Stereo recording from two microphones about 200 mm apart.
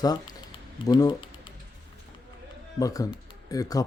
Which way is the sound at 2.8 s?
15° left (ahead or behind).